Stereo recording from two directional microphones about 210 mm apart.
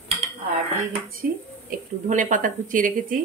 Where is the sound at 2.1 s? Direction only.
35° right (ahead or behind).